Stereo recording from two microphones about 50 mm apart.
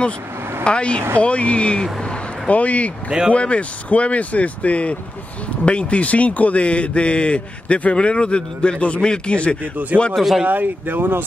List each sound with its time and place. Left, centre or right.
0.7 s a man's voice: left
1.8 s a sound: centre
2.5 s a man's voice: left
10.1 s speech: centre
10.4 s speech: right